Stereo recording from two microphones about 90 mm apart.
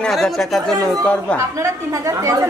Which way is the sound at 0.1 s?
Centre (ahead or behind).